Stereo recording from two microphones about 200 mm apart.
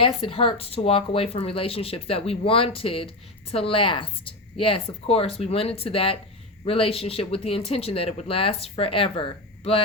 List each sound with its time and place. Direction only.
0.0 s speech: 25° left (ahead or behind)